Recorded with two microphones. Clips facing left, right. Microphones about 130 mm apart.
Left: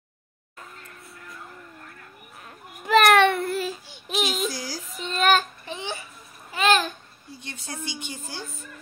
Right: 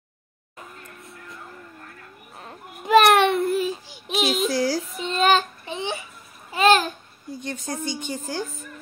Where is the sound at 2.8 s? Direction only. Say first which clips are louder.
Right 1 dB; 25° right (ahead or behind).